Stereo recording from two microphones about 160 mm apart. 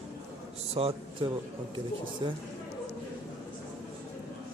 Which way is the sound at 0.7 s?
35° right (ahead or behind).